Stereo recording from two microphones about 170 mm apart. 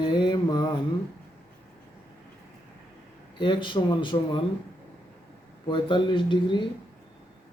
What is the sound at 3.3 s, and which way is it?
Mantra, 30° left (ahead or behind).